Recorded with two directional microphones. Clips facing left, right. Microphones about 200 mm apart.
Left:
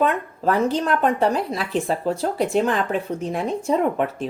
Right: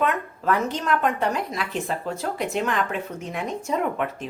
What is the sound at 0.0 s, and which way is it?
Speech, 35° left (ahead or behind).